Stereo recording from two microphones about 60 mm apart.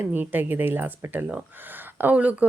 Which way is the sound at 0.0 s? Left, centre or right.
Right.